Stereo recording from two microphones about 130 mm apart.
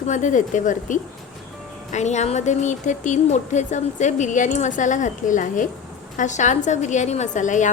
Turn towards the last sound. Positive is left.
turn(degrees=70)  # may be behind; listen again after turning